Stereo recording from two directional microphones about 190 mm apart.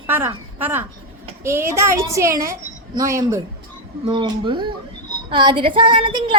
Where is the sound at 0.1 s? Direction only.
10° right (ahead or behind).